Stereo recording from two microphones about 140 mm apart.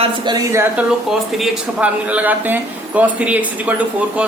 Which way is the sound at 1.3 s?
Centre (ahead or behind).